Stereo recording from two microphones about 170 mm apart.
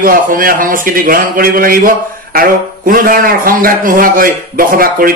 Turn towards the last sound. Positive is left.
turn(degrees=-60)  # may be behind; listen again after turning